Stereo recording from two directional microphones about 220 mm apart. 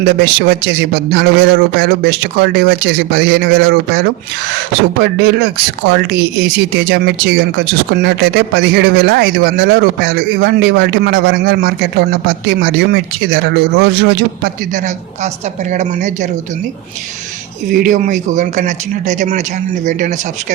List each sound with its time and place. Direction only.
0.2 s speech: 45° right (ahead or behind)
17.7 s speech: 40° right (ahead or behind)